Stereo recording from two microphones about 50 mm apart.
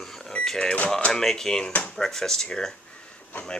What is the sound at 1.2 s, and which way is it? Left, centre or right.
Speech, centre.